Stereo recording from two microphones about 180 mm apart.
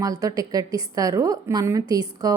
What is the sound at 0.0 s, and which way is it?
A woman's voice, 20° right (ahead or behind).